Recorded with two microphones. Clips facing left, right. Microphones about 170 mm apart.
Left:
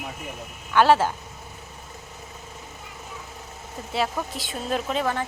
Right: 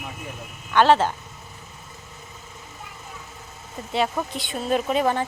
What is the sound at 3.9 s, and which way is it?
Speech, centre (ahead or behind).